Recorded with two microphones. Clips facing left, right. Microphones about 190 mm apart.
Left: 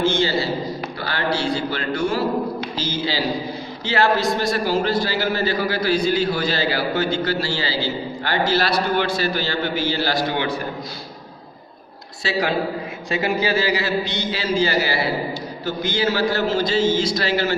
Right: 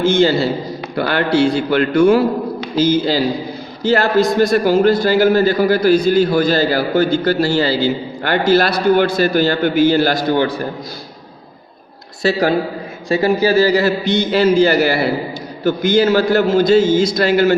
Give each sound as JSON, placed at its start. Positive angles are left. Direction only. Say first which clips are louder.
{"t": 0.0, "sound": "a man's voice", "louder": "right 7 dB", "side_deg": -50}
{"t": 12.2, "sound": "a man's voice", "louder": "right 6 dB", "side_deg": -45}